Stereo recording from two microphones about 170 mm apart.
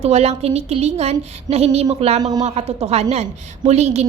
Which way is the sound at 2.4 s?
35° right (ahead or behind).